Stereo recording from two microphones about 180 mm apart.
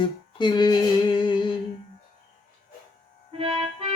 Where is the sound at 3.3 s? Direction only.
30° right (ahead or behind).